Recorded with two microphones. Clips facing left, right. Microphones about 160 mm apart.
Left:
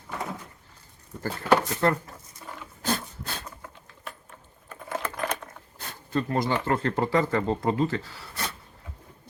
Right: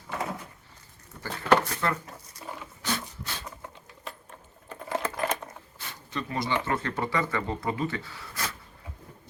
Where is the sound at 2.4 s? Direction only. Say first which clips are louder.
Right 2 dB; 10° right (ahead or behind).